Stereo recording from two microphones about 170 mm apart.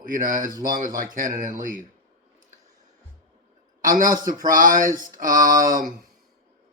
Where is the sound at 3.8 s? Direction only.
50° right (ahead or behind).